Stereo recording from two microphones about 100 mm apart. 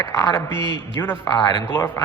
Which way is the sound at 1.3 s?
50° left (ahead or behind).